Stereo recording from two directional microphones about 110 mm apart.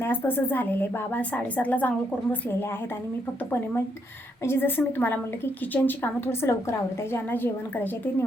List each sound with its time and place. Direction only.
0.0 s a woman's voice: 20° left (ahead or behind)
4.4 s a woman's voice: 20° left (ahead or behind)